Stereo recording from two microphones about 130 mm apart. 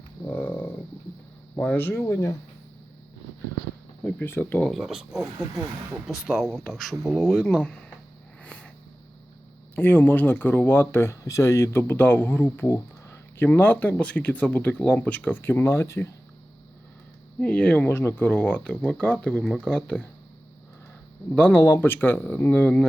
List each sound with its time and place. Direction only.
0.3 s a sound: 15° left (ahead or behind)
1.5 s speech: 15° left (ahead or behind)
4.2 s speech: 15° left (ahead or behind)
4.7 s speech: 5° right (ahead or behind)
8.4 s a sound: 10° left (ahead or behind)
9.7 s speech: 15° left (ahead or behind)
17.4 s speech: 10° left (ahead or behind)
21.3 s speech: 15° left (ahead or behind)